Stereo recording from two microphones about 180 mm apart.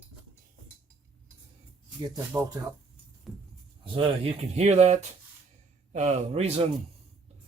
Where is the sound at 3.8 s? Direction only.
30° right (ahead or behind).